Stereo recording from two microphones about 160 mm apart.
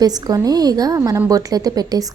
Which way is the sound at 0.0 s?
25° right (ahead or behind).